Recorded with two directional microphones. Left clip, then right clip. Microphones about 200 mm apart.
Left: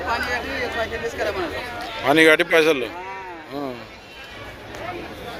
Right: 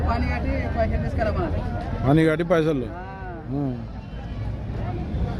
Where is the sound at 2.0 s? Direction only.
5° left (ahead or behind).